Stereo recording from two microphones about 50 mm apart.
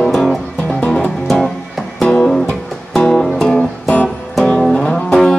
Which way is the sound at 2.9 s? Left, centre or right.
Centre.